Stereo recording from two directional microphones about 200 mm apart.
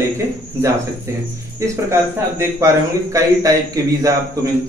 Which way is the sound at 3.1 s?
15° right (ahead or behind).